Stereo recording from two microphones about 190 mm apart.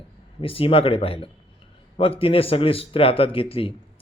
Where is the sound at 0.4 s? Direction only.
30° left (ahead or behind).